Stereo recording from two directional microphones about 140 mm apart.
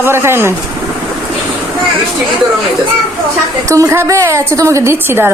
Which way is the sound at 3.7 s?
20° right (ahead or behind).